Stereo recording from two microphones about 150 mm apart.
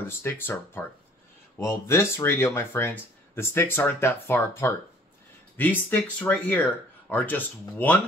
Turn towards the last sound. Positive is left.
turn(degrees=10)  # may be behind; listen again after turning